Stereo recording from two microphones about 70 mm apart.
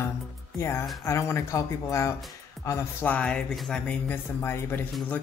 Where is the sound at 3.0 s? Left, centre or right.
Centre.